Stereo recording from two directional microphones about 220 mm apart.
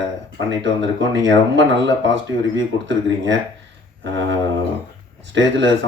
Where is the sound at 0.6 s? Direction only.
55° right (ahead or behind).